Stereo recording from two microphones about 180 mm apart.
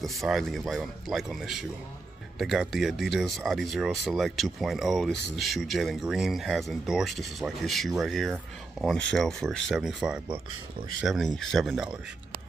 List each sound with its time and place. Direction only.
0.0 s speech: centre (ahead or behind)